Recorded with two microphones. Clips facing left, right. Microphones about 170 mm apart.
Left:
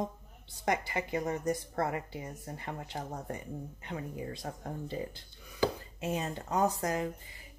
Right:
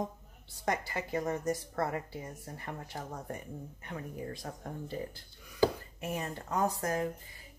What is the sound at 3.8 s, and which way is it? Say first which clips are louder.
Speech: left 1 dB; 20° left (ahead or behind).